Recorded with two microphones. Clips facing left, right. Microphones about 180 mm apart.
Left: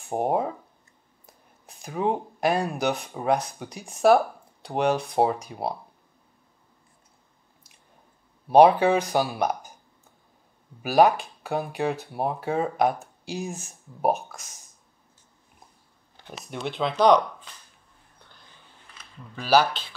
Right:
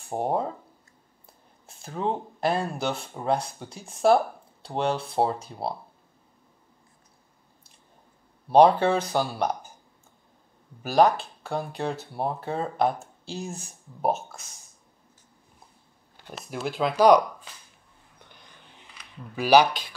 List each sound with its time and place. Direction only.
0.0 s speech: 15° left (ahead or behind)
8.5 s speech: 15° left (ahead or behind)
10.8 s speech: 15° left (ahead or behind)
16.3 s speech: centre (ahead or behind)
18.2 s vehicle: 15° right (ahead or behind)
19.2 s speech: 10° right (ahead or behind)